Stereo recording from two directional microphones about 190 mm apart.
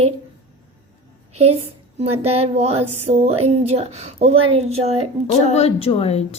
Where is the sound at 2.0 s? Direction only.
30° right (ahead or behind).